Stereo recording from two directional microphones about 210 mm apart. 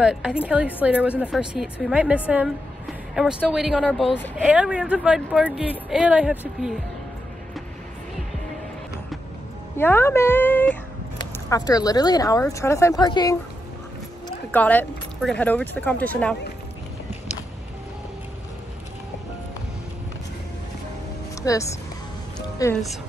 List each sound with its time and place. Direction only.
0.0 s a woman's voice: 5° right (ahead or behind)
9.8 s speech: 10° left (ahead or behind)
14.5 s speech: 10° left (ahead or behind)
21.4 s speech: 15° left (ahead or behind)